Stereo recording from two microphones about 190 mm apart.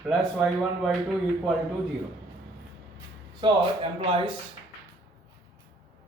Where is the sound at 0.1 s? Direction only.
Centre (ahead or behind).